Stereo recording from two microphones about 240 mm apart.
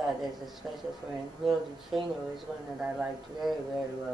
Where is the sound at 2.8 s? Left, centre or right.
Centre.